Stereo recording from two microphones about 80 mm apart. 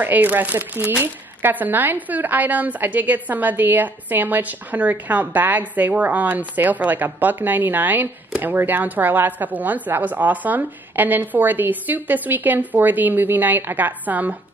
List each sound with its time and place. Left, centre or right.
0.0 s speech: right